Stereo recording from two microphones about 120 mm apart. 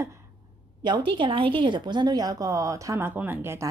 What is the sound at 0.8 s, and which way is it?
A woman's voice, 40° right (ahead or behind).